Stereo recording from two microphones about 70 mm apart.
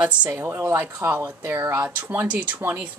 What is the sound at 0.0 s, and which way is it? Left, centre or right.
Speech, right.